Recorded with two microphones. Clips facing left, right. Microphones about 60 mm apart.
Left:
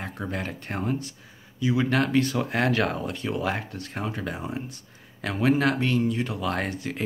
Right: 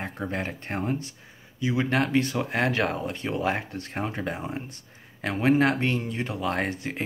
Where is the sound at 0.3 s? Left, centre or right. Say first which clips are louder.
Right 1 dB; right.